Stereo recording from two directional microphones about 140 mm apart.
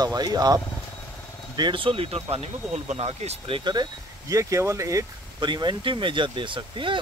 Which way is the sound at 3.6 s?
30° right (ahead or behind).